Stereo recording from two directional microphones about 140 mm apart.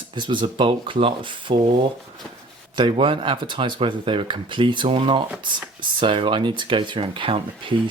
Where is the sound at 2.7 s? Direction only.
35° right (ahead or behind).